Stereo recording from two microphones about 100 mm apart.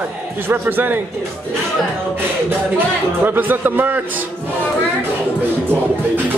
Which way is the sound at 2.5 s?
20° right (ahead or behind).